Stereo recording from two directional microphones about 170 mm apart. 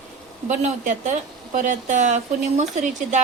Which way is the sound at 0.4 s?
45° right (ahead or behind).